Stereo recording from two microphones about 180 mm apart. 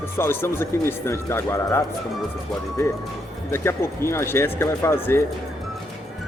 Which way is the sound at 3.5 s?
15° left (ahead or behind).